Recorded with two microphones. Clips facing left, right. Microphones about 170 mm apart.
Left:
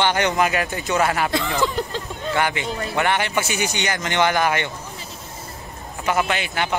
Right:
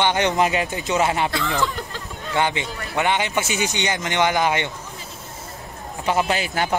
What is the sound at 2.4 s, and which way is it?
Speech, 20° right (ahead or behind).